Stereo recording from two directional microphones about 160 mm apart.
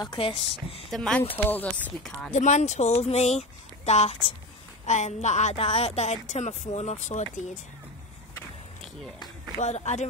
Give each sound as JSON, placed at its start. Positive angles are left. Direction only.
{"t": 0.0, "sound": "speech", "side_deg": 30}
{"t": 0.8, "sound": "speech", "side_deg": 0}
{"t": 2.3, "sound": "speech", "side_deg": 45}
{"t": 9.6, "sound": "speech", "side_deg": 45}